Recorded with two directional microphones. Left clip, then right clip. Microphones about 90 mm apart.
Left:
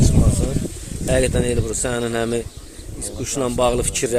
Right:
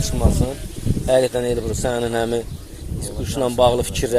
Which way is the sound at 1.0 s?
30° left (ahead or behind).